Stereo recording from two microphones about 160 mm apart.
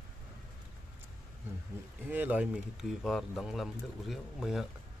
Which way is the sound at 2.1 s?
10° right (ahead or behind).